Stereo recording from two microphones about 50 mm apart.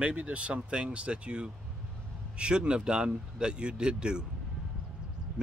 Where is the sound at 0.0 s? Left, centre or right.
Right.